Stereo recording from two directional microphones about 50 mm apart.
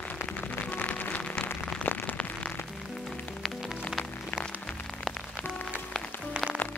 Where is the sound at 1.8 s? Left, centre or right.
Left.